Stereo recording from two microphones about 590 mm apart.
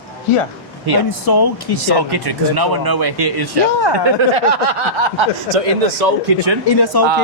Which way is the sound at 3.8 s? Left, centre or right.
Left.